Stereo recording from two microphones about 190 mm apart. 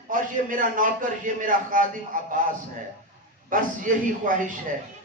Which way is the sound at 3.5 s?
45° right (ahead or behind).